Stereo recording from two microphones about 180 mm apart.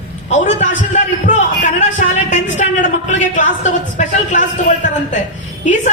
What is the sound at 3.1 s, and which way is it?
A man's voice, 40° left (ahead or behind).